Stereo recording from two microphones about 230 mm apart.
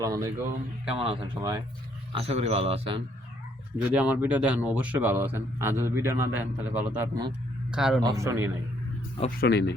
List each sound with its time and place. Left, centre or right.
0.0 s speech: centre
2.1 s a man's voice: right
3.8 s a man's voice: centre
8.0 s speech: centre
9.4 s speech: left